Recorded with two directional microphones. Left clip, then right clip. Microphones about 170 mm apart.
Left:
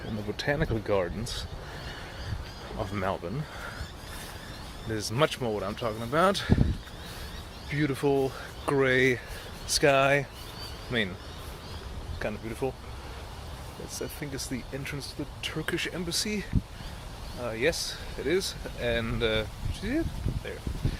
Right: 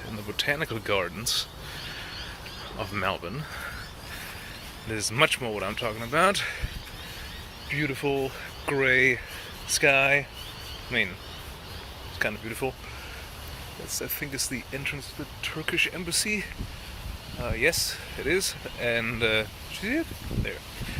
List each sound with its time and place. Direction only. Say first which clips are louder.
0.3 s speech: right 2 dB; 35° left (ahead or behind)
2.7 s speech: right 2 dB; 15° left (ahead or behind)
4.9 s speech: right 4 dB; 20° left (ahead or behind)
7.7 s speech: left 1 dB; 35° left (ahead or behind)
8.6 s speech: right 2 dB; 25° left (ahead or behind)
12.2 s speech: right 3 dB; centre (ahead or behind)
14.0 s speech: right 3 dB; centre (ahead or behind)
15.4 s speech: right 6 dB; 25° left (ahead or behind); by 20.0 s centre (ahead or behind)